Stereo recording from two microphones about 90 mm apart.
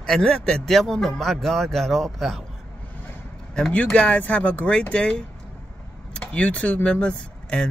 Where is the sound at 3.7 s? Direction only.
15° left (ahead or behind).